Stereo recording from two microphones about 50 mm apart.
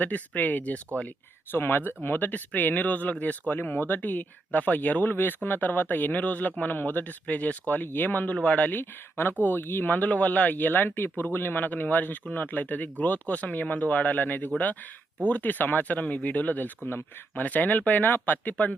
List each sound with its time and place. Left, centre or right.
0.0 s speech: left
1.5 s speech: left
5.1 s speech: left
8.8 s speech: left